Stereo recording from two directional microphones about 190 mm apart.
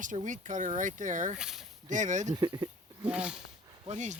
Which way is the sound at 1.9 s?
40° right (ahead or behind).